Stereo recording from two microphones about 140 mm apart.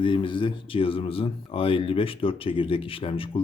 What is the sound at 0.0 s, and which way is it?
Speech, 35° left (ahead or behind).